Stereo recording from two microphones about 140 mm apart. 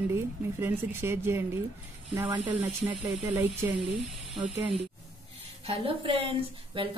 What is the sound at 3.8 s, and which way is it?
Speech, 35° right (ahead or behind).